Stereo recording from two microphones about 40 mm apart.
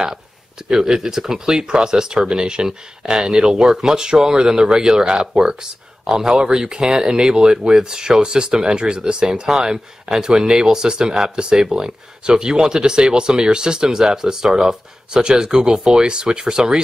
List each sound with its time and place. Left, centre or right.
0.7 s speech: centre